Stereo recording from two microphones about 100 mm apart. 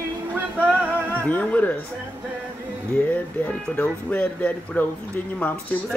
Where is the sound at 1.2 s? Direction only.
15° left (ahead or behind).